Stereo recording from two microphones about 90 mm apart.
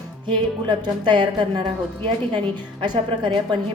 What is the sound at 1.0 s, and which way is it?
Speech, 60° right (ahead or behind).